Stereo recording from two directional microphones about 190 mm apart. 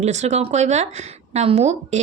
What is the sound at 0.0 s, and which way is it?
Speech, 35° right (ahead or behind).